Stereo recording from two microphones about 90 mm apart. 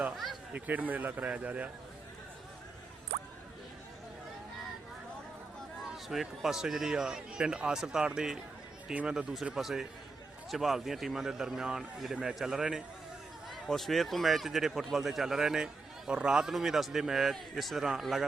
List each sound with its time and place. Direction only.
0.5 s a man's voice: 20° right (ahead or behind)
5.9 s a man's voice: centre (ahead or behind)